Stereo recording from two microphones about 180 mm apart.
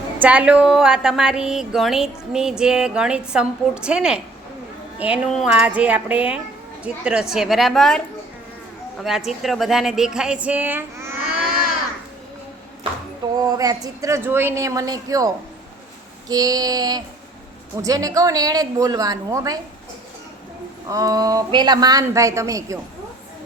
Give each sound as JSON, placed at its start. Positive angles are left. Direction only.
{"t": 0.2, "sound": "speech", "side_deg": -10}
{"t": 9.0, "sound": "speech", "side_deg": 0}
{"t": 13.4, "sound": "speech", "side_deg": -20}
{"t": 16.3, "sound": "a woman's voice", "side_deg": -20}
{"t": 20.9, "sound": "a woman's voice", "side_deg": -20}